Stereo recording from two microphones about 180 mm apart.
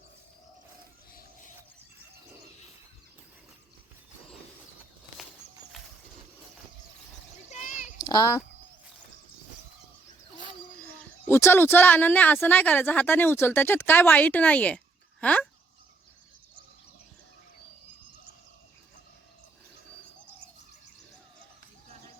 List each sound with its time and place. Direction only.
7.5 s a sound: 45° left (ahead or behind)
8.0 s a child's voice: 20° left (ahead or behind)
10.8 s speech: 15° left (ahead or behind)